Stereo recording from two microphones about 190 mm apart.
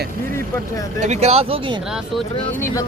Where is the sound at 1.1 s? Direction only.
35° right (ahead or behind).